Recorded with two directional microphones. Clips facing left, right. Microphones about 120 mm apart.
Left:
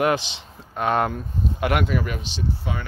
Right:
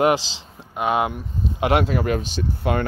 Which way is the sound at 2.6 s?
65° right (ahead or behind).